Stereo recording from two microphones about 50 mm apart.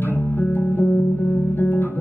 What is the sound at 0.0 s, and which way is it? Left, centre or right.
Music, left.